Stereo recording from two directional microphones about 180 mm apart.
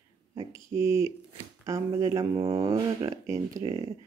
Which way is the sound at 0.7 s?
15° right (ahead or behind).